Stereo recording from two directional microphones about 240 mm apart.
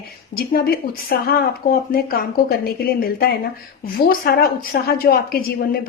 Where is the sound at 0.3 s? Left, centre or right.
Left.